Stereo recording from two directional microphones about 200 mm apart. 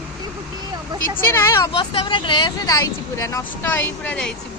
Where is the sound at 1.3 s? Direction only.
15° left (ahead or behind).